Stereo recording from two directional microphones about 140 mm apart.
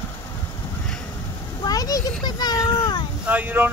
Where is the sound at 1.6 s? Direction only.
25° left (ahead or behind).